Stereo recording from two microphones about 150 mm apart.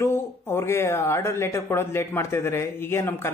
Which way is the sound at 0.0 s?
15° left (ahead or behind).